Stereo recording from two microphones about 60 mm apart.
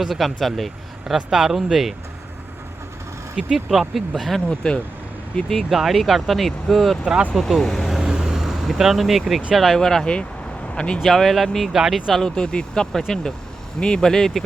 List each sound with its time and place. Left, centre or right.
0.0 s speech: centre
3.3 s speech: centre
5.5 s speech: centre
7.0 s speech: centre
7.3 s speech: centre
7.6 s vehicle: centre
9.6 s speech: centre
11.0 s speech: centre
12.2 s speech: centre